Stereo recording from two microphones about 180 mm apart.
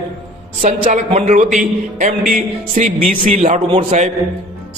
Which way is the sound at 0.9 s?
40° right (ahead or behind).